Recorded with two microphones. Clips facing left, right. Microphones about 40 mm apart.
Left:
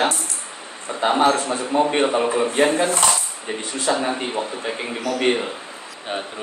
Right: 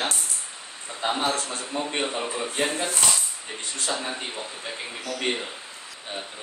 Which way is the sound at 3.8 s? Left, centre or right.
Left.